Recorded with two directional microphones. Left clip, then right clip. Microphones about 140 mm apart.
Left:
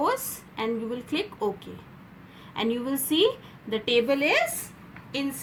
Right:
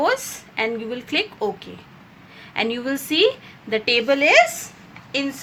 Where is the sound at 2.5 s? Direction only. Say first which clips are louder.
Right 5 dB; 25° right (ahead or behind).